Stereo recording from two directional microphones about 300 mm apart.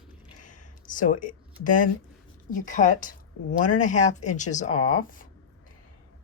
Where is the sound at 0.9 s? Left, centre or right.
Left.